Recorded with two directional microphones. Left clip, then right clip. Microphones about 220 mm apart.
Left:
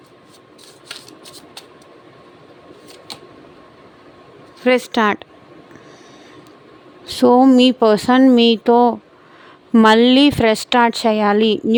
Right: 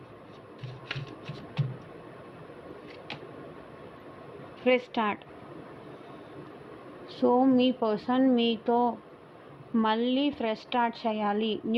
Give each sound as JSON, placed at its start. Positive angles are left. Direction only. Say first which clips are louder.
{"t": 4.6, "sound": "speech", "louder": "left 11 dB", "side_deg": 55}
{"t": 7.1, "sound": "speech", "louder": "left 12 dB", "side_deg": 65}